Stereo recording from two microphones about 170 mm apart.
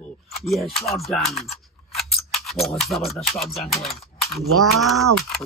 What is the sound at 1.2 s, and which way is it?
Speech, 35° left (ahead or behind).